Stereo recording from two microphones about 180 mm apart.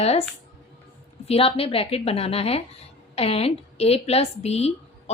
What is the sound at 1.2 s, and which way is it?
A woman's voice, 30° left (ahead or behind).